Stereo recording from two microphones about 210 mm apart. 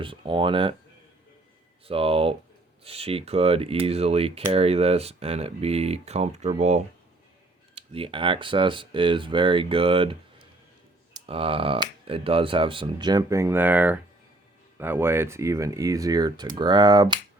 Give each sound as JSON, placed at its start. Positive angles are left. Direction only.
{"t": 0.0, "sound": "speech", "side_deg": -25}
{"t": 1.9, "sound": "speech", "side_deg": -25}